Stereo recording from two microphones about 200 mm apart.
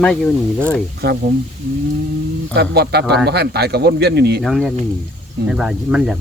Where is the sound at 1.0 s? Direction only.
55° right (ahead or behind).